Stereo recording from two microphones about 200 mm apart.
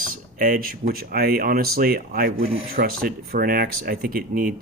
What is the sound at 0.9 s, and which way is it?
Speech, 50° right (ahead or behind).